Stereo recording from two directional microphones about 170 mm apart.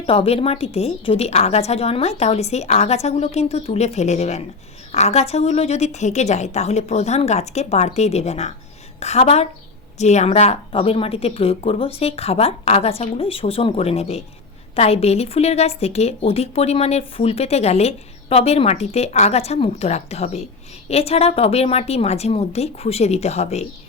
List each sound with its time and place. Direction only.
0.0 s a woman's voice: 30° left (ahead or behind)